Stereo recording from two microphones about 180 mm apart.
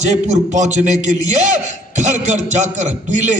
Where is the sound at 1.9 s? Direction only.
40° right (ahead or behind).